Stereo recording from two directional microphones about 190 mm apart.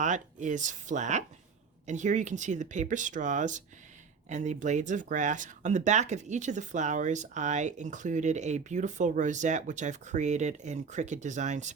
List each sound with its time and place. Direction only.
0.0 s speech: 40° right (ahead or behind)